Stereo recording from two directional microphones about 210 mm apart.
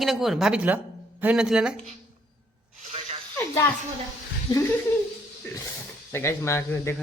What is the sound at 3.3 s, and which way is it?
Speech, 10° left (ahead or behind).